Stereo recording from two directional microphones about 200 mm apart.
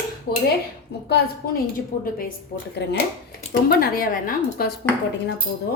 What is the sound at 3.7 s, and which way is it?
Speech, 50° left (ahead or behind).